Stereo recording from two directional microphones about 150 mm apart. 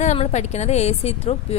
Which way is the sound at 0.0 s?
50° left (ahead or behind).